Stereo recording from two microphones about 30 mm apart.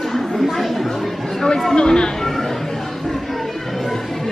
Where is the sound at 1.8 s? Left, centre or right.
Left.